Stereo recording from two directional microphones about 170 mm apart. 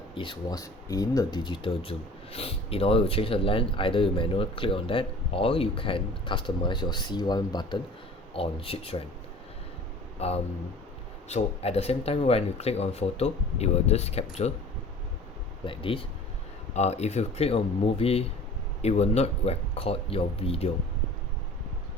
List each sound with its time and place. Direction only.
0.1 s speech: 30° left (ahead or behind)
10.2 s speech: 40° left (ahead or behind)
15.6 s speech: 30° left (ahead or behind)